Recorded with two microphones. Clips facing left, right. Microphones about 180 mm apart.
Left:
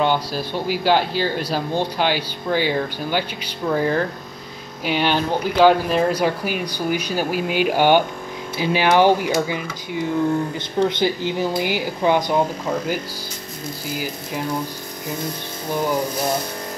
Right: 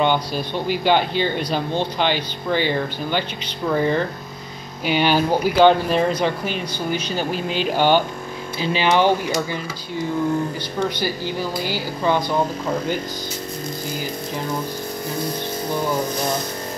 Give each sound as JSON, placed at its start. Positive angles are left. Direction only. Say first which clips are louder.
{"t": 0.0, "sound": "speech", "louder": "even", "side_deg": 5}
{"t": 10.9, "sound": "speech", "louder": "left 4 dB", "side_deg": 20}